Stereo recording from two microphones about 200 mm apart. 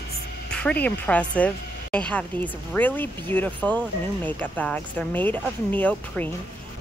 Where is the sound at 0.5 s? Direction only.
5° left (ahead or behind).